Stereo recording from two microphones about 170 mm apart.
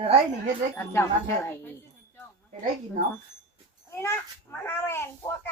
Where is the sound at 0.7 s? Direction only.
15° left (ahead or behind).